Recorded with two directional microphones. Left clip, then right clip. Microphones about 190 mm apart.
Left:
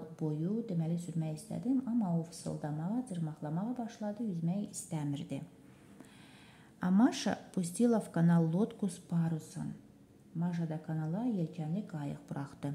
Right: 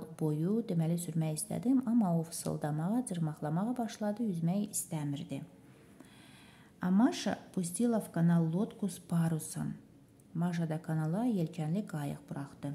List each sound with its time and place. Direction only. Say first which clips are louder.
0.1 s a woman's voice: right 4 dB; 20° right (ahead or behind)
4.8 s speech: even; centre (ahead or behind)
6.8 s speech: even; centre (ahead or behind)
9.1 s a woman's voice: right 2 dB; 20° right (ahead or behind)
12.3 s speech: left 1 dB; 5° left (ahead or behind)